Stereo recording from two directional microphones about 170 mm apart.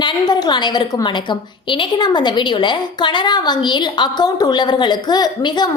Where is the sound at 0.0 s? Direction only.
25° left (ahead or behind).